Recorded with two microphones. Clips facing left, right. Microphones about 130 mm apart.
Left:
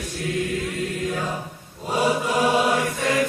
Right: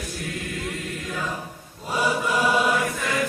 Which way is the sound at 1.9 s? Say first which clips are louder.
Left 2 dB; 35° left (ahead or behind).